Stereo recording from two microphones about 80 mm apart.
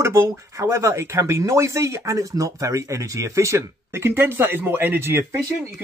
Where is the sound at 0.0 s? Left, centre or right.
Right.